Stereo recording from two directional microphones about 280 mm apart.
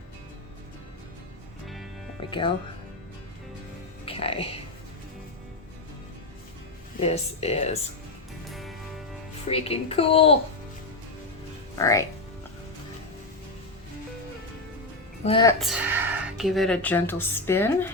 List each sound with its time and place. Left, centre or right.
1.6 s music: centre
2.2 s speech: centre
4.0 s music: centre
7.0 s a woman's voice: left
8.4 s music: centre
9.5 s a woman's voice: left
11.8 s speech: centre
15.2 s speech: centre
15.5 s speech: centre